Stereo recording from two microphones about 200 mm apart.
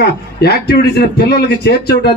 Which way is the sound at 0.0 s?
55° left (ahead or behind).